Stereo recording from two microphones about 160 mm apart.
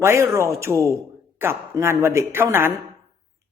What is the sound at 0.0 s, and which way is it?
Speech, 15° right (ahead or behind).